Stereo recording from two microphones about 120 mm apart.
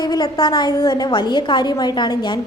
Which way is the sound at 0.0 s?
35° left (ahead or behind).